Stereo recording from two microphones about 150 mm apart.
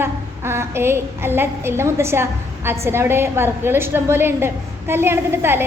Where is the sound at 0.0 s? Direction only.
15° right (ahead or behind).